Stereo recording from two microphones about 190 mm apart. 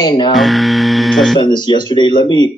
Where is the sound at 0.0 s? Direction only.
25° left (ahead or behind).